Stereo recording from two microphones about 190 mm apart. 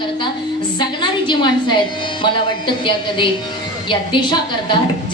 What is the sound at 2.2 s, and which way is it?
Music, 25° left (ahead or behind).